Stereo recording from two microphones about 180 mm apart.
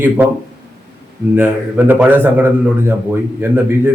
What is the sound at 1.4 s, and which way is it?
A man's voice, 10° right (ahead or behind).